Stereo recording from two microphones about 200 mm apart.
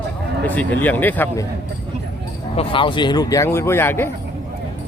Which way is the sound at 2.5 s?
25° left (ahead or behind).